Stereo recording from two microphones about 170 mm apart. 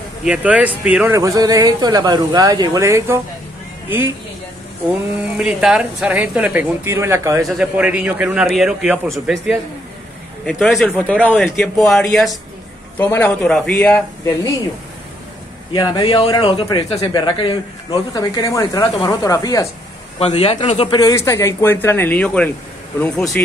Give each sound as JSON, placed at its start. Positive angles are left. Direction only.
{"t": 0.2, "sound": "speech", "side_deg": -5}
{"t": 1.1, "sound": "speech", "side_deg": -20}
{"t": 5.4, "sound": "speech", "side_deg": -5}
{"t": 7.4, "sound": "speech", "side_deg": -5}
{"t": 12.9, "sound": "speech", "side_deg": 10}
{"t": 15.7, "sound": "speech", "side_deg": 25}
{"t": 20.2, "sound": "speech", "side_deg": 35}